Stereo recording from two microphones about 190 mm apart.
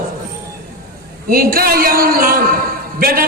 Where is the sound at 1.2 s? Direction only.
50° right (ahead or behind).